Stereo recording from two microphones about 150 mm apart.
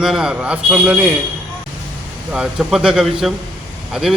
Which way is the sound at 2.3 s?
5° right (ahead or behind).